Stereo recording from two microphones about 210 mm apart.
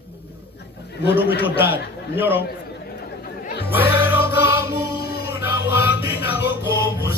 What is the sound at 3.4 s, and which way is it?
Music, 50° left (ahead or behind).